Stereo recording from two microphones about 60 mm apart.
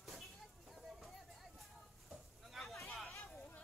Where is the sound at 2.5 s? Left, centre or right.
Centre.